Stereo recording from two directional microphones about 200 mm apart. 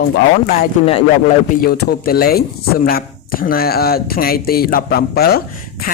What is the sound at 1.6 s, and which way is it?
Speech, 50° left (ahead or behind).